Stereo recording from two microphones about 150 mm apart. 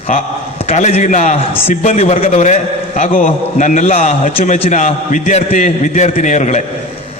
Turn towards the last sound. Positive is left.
turn(degrees=50)  # may be behind; listen again after turning